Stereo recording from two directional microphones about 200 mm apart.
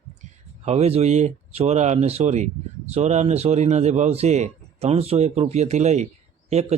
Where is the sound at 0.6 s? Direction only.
30° right (ahead or behind).